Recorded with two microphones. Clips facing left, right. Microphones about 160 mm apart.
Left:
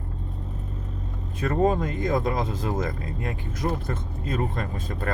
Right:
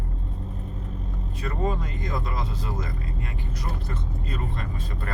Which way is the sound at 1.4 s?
50° left (ahead or behind).